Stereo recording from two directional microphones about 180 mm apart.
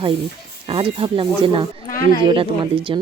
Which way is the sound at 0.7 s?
30° right (ahead or behind).